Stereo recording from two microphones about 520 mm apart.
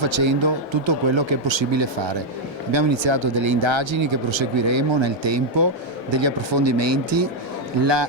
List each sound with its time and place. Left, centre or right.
0.0 s speech: right